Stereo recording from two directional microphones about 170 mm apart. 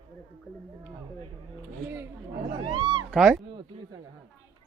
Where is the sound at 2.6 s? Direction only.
30° right (ahead or behind).